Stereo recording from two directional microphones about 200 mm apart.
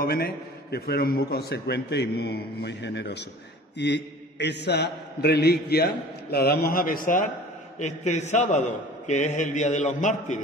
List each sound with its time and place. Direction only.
0.0 s a man's voice: 50° left (ahead or behind)